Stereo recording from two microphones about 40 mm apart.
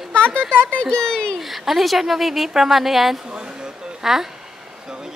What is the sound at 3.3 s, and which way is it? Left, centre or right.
Speech, right.